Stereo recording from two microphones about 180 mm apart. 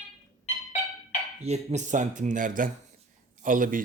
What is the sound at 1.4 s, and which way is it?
A man's voice, 35° right (ahead or behind).